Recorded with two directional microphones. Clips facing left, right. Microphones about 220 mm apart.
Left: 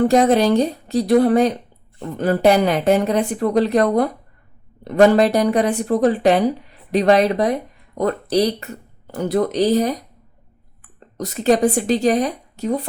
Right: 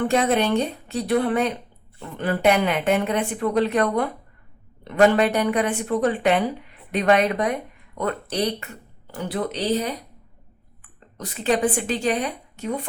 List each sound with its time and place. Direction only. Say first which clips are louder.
0.0 s speech: left 6 dB; 40° left (ahead or behind)
11.2 s speech: left 6 dB; 40° left (ahead or behind)